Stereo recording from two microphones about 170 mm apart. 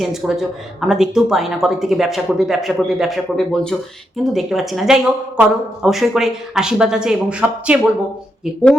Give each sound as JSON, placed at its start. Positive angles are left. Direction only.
{"t": 0.0, "sound": "speech", "side_deg": 0}